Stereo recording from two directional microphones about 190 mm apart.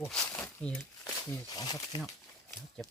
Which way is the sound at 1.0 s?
20° left (ahead or behind).